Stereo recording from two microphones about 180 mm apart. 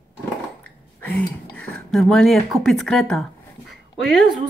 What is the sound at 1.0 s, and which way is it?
Speech, 5° left (ahead or behind).